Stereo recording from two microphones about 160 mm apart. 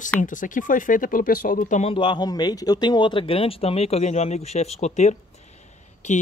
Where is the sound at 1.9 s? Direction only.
30° left (ahead or behind).